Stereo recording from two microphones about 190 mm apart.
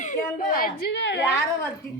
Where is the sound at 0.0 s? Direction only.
45° left (ahead or behind); by 1.2 s 65° left (ahead or behind).